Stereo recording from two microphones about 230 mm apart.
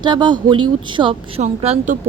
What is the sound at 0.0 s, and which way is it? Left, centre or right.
Speech, centre.